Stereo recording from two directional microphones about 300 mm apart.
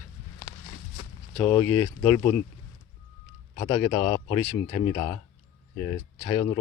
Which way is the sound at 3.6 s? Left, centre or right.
Centre.